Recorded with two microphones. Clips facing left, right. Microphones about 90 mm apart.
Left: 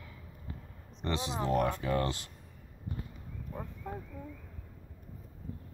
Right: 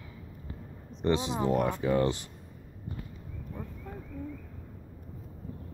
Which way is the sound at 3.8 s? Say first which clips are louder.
Left 3 dB; 20° left (ahead or behind).